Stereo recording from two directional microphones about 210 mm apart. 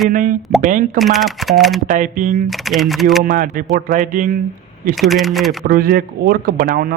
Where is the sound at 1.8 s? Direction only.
40° right (ahead or behind).